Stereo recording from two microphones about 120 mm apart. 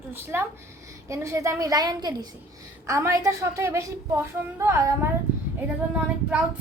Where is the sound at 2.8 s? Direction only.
25° right (ahead or behind).